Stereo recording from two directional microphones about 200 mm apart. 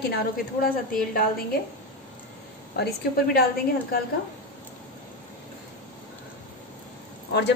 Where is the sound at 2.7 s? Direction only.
55° left (ahead or behind).